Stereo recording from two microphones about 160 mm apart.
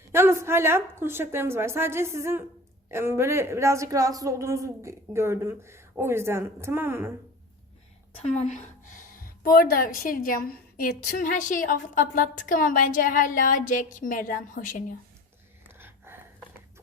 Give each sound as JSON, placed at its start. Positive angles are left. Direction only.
{"t": 0.1, "sound": "a woman's voice", "side_deg": -15}
{"t": 8.2, "sound": "a woman's voice", "side_deg": 45}
{"t": 15.8, "sound": "a sound", "side_deg": -15}